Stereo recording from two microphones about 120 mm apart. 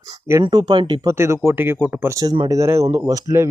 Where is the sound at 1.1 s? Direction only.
25° right (ahead or behind).